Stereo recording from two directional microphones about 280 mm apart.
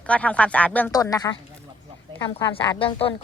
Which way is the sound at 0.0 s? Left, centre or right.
Centre.